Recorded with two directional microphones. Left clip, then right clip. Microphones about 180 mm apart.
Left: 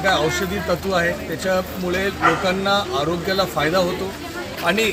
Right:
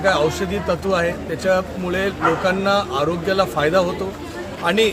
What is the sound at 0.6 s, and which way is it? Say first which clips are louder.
Speech: right 1 dB; 20° right (ahead or behind).